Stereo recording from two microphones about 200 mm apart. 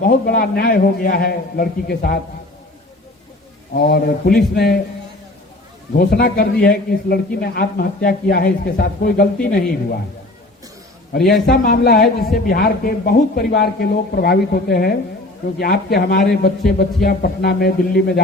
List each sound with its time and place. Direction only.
0.0 s a man's voice: 45° left (ahead or behind)
3.7 s a man's voice: 50° left (ahead or behind)
6.0 s a man's voice: 50° left (ahead or behind)
11.1 s a man's voice: 50° left (ahead or behind)